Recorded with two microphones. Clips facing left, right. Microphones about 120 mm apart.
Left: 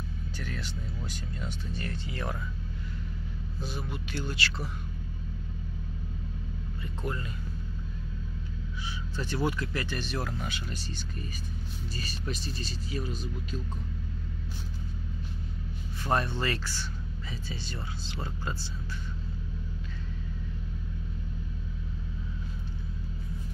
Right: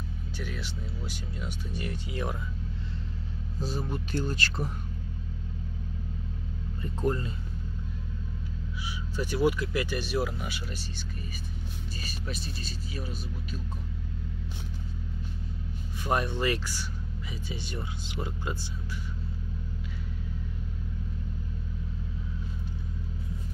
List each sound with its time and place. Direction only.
0.4 s speech: 5° right (ahead or behind)
3.5 s speech: 40° right (ahead or behind)
6.8 s speech: 40° right (ahead or behind)
9.1 s speech: 10° right (ahead or behind)
16.0 s speech: 15° right (ahead or behind)